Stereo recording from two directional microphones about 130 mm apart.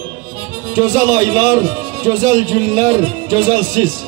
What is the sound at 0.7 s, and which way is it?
Speech, 25° right (ahead or behind).